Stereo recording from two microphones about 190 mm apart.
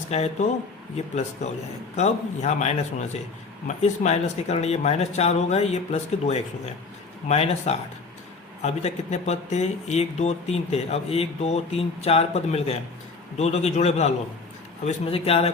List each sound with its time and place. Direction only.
0.1 s speech: 35° left (ahead or behind)